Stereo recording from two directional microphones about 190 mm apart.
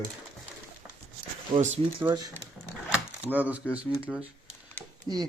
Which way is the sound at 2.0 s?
20° right (ahead or behind).